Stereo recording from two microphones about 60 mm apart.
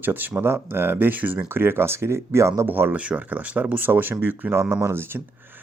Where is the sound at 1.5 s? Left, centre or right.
Right.